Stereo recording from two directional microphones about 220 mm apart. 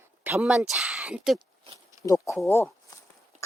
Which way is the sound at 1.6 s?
15° right (ahead or behind).